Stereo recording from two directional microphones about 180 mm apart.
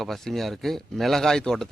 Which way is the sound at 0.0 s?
Centre (ahead or behind).